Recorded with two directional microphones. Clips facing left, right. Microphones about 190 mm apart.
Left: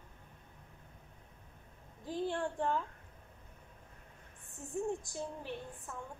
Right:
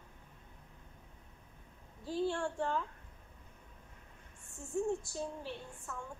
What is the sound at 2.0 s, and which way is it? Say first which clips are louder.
Speech: right 1 dB; 15° left (ahead or behind).